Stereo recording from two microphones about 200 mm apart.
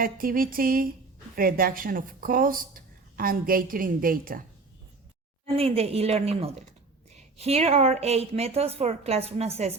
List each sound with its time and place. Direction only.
0.0 s speech: 45° right (ahead or behind)
5.5 s a woman's voice: 30° right (ahead or behind)